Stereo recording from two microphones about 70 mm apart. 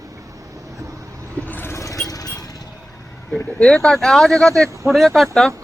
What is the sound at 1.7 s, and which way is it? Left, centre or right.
Music, left.